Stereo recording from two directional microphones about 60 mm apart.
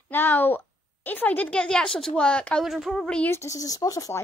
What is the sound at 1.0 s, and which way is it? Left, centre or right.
A woman's voice, left.